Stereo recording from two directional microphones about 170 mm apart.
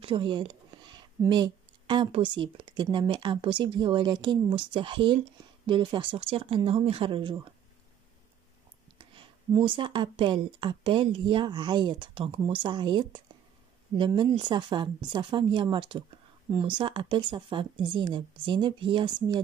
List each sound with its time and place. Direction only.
0.0 s a sound: 30° right (ahead or behind)
1.3 s speech: 25° right (ahead or behind)
8.9 s speech: 30° right (ahead or behind)